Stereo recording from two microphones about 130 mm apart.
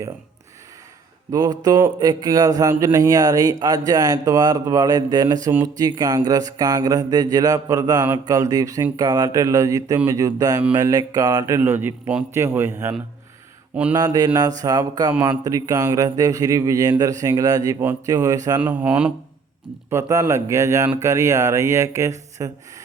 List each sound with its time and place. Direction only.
1.3 s speech: 30° right (ahead or behind)
5.6 s mantra: 30° right (ahead or behind)
8.2 s speech: 30° right (ahead or behind)
13.9 s mantra: 30° right (ahead or behind)
15.2 s speech: 25° right (ahead or behind)
18.6 s a man's voice: 10° right (ahead or behind)
19.9 s speech: 25° right (ahead or behind)